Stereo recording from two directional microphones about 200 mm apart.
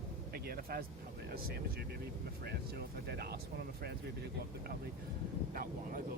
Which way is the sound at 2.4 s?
50° right (ahead or behind).